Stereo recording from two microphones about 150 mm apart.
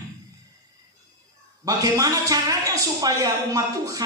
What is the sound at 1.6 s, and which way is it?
Speech, 25° right (ahead or behind).